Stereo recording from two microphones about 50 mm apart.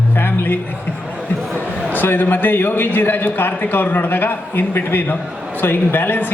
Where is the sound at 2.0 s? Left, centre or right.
Left.